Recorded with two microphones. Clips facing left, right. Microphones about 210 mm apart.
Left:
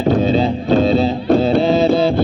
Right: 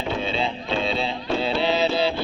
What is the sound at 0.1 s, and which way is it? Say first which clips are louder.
Music: left 12 dB; 40° left (ahead or behind).